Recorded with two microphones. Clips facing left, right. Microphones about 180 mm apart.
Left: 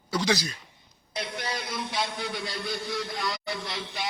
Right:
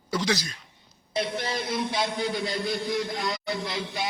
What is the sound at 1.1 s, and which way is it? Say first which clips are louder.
A man's voice: right 5 dB; 25° right (ahead or behind).